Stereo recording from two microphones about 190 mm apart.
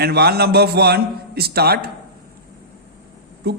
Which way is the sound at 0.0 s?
55° right (ahead or behind).